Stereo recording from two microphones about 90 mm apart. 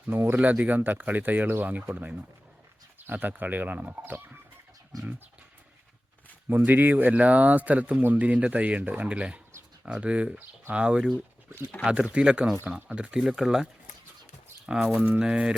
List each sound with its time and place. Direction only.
0.1 s speech: 25° right (ahead or behind)
4.9 s a sound: 40° right (ahead or behind)
6.7 s speech: 20° right (ahead or behind)
14.7 s speech: 5° right (ahead or behind)